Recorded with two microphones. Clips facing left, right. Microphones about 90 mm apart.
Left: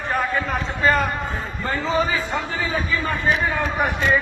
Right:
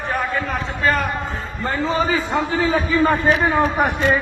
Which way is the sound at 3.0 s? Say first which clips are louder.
Right 6 dB; 45° right (ahead or behind).